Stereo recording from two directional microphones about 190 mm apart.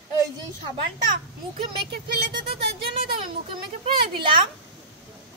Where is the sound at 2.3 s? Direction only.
25° right (ahead or behind).